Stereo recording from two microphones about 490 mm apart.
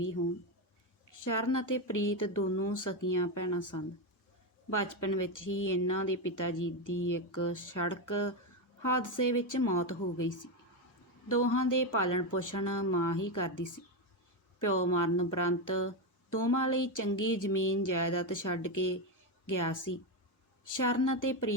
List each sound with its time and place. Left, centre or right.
1.1 s speech: left